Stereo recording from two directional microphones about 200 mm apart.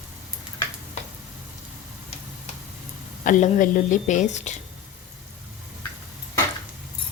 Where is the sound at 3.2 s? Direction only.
40° left (ahead or behind).